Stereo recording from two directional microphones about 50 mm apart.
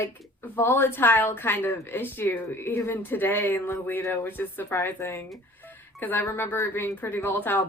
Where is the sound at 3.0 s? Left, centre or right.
Left.